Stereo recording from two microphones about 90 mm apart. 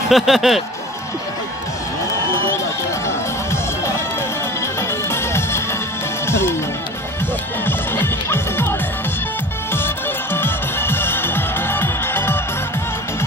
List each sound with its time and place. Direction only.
0.1 s speech: 5° right (ahead or behind)
5.1 s music: 30° left (ahead or behind)
7.6 s music: 25° left (ahead or behind)
10.3 s music: 25° left (ahead or behind)